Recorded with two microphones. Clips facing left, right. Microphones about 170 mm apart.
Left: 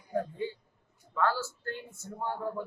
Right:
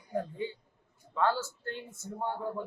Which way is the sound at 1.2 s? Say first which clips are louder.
Even; 20° right (ahead or behind).